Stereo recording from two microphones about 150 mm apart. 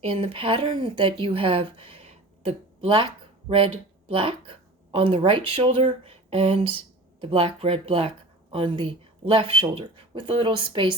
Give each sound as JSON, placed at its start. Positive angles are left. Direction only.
{"t": 0.0, "sound": "speech", "side_deg": -40}